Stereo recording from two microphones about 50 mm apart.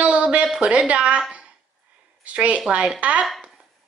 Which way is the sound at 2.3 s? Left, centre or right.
Right.